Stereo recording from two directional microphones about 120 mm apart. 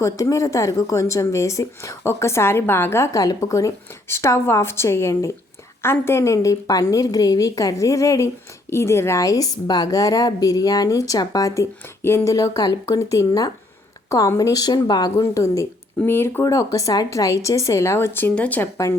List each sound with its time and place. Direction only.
0.0 s a woman's voice: 25° left (ahead or behind)
15.1 s a woman's voice: 25° left (ahead or behind)